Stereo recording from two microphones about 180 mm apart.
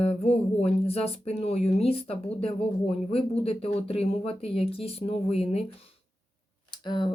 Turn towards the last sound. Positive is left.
turn(degrees=25)  # may be behind; listen again after turning